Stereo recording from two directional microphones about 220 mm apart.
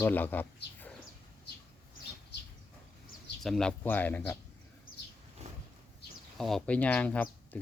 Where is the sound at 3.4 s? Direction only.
Centre (ahead or behind).